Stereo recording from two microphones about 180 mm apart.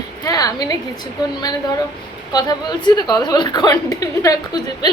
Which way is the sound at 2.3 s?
25° left (ahead or behind).